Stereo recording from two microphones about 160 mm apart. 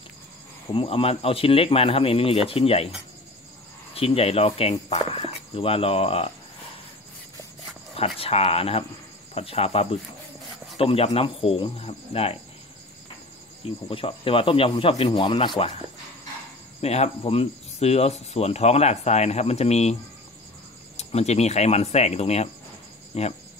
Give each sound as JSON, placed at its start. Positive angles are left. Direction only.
{"t": 0.7, "sound": "speech", "side_deg": 35}
{"t": 3.9, "sound": "speech", "side_deg": 35}
{"t": 8.2, "sound": "speech", "side_deg": 40}
{"t": 13.8, "sound": "speech", "side_deg": 35}
{"t": 16.8, "sound": "speech", "side_deg": 40}